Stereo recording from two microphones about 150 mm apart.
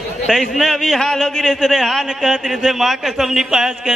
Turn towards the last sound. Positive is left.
turn(degrees=-5)  # may be behind; listen again after turning